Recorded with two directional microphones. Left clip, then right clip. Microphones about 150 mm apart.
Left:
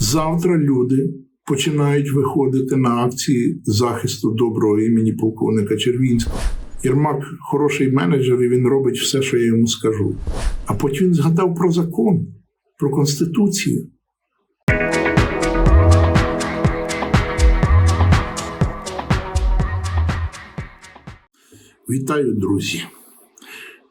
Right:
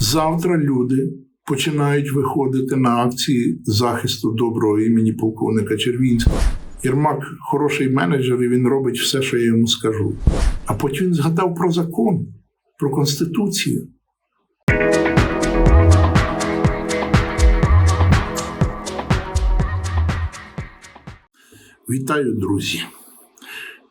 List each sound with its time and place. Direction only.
0.0 s a man's voice: 15° right (ahead or behind)
6.3 s speech: centre (ahead or behind)
6.8 s a man's voice: 15° right (ahead or behind)
10.2 s speech: centre (ahead or behind)
10.7 s a man's voice: 15° right (ahead or behind)
14.6 s music: centre (ahead or behind)
21.8 s a man's voice: 15° right (ahead or behind)
23.4 s a sound: 15° right (ahead or behind)